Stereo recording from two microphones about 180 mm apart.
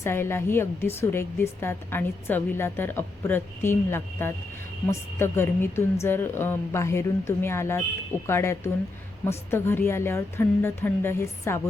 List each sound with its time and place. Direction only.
0.0 s a woman's voice: 15° left (ahead or behind)